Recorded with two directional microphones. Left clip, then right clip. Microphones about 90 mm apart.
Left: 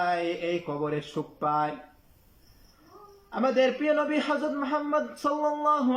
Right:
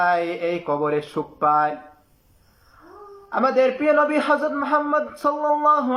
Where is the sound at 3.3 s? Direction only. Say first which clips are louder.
Right 6 dB; 35° left (ahead or behind).